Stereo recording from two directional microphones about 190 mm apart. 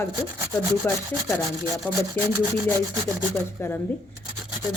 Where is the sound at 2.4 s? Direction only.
15° right (ahead or behind).